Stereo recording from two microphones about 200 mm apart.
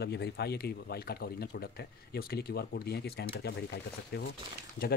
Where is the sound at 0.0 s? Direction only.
55° left (ahead or behind).